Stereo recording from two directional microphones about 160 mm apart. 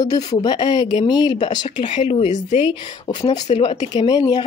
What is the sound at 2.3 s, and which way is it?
Speech, 50° left (ahead or behind).